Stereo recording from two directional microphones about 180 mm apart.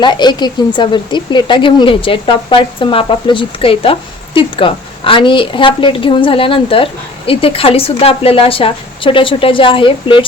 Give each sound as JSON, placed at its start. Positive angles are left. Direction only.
{"t": 0.0, "sound": "a woman's voice", "side_deg": 25}